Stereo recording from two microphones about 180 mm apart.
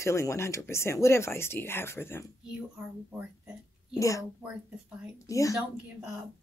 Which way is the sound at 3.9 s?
20° left (ahead or behind).